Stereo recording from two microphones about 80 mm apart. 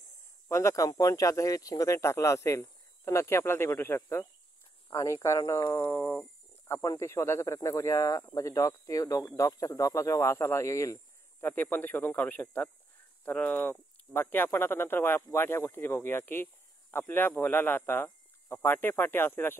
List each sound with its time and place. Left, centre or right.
0.5 s speech: left
11.4 s speech: left